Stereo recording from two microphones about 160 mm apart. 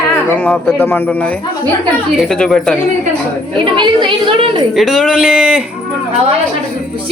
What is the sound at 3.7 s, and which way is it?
Speech, 30° right (ahead or behind).